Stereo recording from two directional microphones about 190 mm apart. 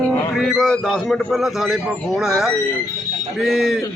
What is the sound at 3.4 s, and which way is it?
Speech, centre (ahead or behind).